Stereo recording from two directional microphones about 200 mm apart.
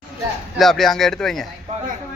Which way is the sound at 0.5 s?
Centre (ahead or behind).